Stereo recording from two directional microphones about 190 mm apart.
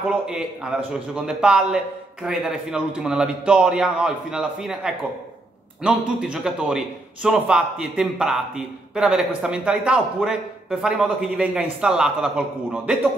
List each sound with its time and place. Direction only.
0.1 s speech: 5° right (ahead or behind)